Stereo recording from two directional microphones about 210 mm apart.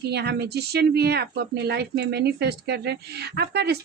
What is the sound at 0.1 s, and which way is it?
Female singing, 50° right (ahead or behind).